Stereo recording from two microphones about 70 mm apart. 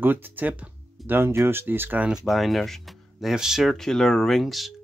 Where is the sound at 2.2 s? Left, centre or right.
Centre.